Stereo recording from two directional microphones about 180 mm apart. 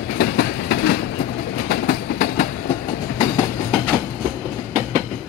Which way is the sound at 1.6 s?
55° left (ahead or behind).